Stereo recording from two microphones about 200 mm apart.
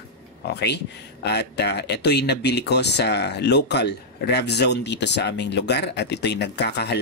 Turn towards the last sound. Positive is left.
turn(degrees=55)  # may be behind; listen again after turning